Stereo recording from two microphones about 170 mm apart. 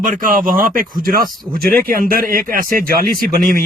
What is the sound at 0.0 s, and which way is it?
Speech, 55° right (ahead or behind).